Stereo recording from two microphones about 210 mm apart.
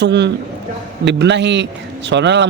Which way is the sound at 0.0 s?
55° right (ahead or behind).